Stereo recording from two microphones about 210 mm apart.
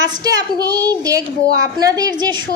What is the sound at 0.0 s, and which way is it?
A woman's voice, 15° right (ahead or behind).